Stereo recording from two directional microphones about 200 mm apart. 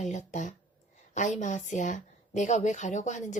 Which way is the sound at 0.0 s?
35° left (ahead or behind).